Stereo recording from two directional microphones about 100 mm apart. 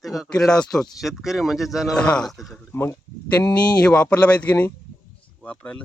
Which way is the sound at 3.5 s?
45° left (ahead or behind).